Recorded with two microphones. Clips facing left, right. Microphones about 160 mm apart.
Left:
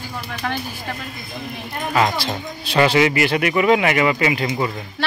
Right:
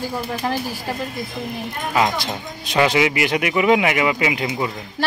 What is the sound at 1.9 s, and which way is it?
Speech, 15° right (ahead or behind).